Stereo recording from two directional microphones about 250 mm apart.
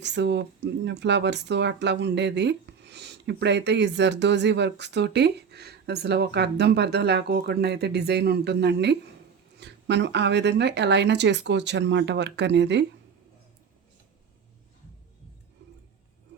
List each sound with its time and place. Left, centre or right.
0.0 s speech: right